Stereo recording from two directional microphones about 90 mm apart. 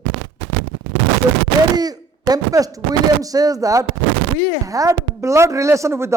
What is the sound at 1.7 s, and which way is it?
Speech, 45° right (ahead or behind).